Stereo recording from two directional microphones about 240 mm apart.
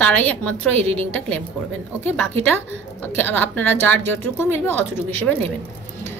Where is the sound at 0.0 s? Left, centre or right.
Centre.